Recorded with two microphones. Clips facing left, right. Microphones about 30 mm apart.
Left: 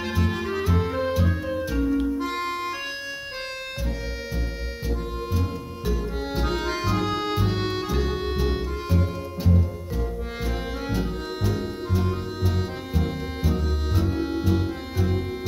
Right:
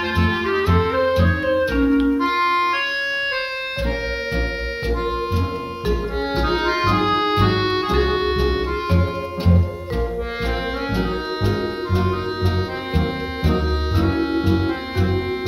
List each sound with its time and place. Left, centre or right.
0.1 s music: right
5.9 s organ: right
7.4 s music: right
10.9 s music: right